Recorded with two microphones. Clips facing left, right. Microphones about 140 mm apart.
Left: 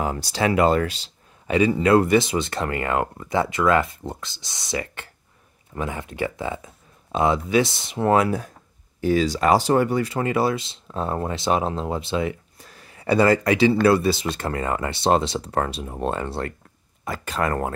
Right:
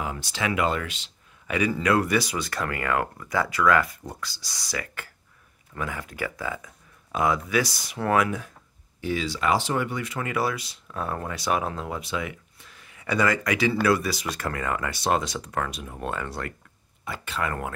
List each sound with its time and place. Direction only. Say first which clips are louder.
0.0 s speech: left 6 dB; 40° left (ahead or behind)
17.0 s speech: left 5 dB; 40° left (ahead or behind)